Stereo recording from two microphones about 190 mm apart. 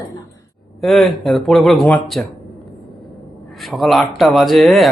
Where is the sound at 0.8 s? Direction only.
Centre (ahead or behind).